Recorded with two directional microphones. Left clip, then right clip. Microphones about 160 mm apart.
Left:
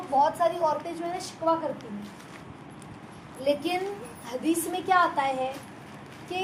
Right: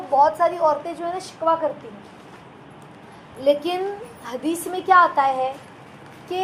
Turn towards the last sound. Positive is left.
turn(degrees=-25)  # may be behind; listen again after turning